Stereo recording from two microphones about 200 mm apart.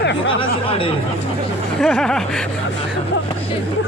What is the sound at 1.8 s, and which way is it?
Speech, 5° left (ahead or behind).